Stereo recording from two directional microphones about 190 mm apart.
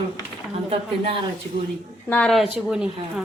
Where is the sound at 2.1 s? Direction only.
5° left (ahead or behind).